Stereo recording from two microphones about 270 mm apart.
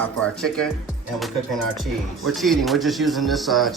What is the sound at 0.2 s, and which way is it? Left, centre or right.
Speech, centre.